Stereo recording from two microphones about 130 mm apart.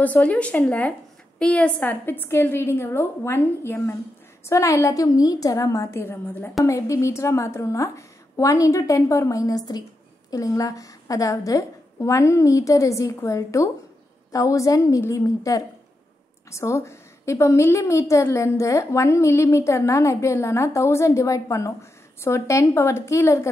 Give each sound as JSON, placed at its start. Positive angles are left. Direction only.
{"t": 0.0, "sound": "a woman's voice", "side_deg": 10}